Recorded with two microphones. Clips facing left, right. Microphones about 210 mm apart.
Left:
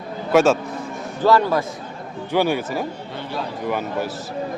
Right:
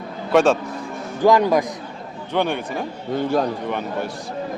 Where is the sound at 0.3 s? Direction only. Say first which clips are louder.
Even; centre (ahead or behind).